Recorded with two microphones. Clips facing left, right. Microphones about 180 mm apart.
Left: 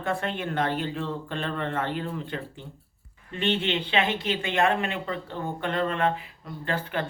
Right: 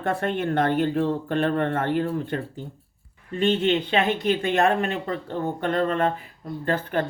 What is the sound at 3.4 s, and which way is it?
Speech, 40° right (ahead or behind).